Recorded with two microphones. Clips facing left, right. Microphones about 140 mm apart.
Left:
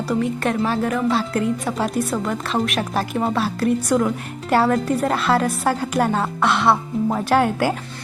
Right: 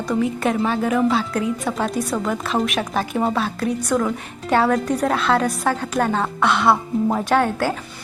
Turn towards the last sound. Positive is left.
turn(degrees=10)  # may be behind; listen again after turning